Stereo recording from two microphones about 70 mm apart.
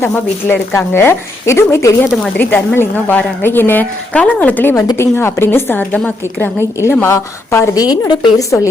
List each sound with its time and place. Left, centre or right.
0.1 s a woman's voice: left
0.7 s a woman's voice: left
2.4 s a woman's voice: left
4.1 s a woman's voice: centre
4.9 s a woman's voice: left
7.8 s speech: left
8.4 s speech: left